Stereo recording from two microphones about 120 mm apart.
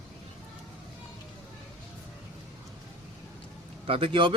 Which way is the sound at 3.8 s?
50° right (ahead or behind).